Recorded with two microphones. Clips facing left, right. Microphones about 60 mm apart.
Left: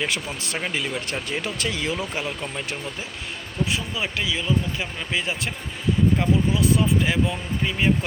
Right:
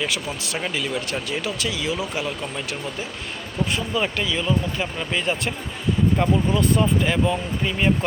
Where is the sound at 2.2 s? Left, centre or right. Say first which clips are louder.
Right 1 dB; centre.